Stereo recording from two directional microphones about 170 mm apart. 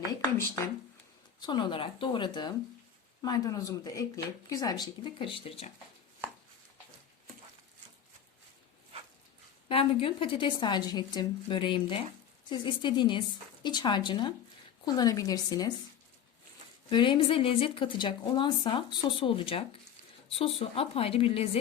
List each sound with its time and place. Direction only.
0.2 s speech: 15° left (ahead or behind)
1.4 s speech: 25° left (ahead or behind)
9.6 s speech: 30° left (ahead or behind)
16.9 s a woman's voice: 30° left (ahead or behind)